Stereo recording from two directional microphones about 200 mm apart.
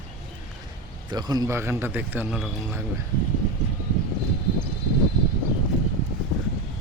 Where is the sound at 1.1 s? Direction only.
20° right (ahead or behind).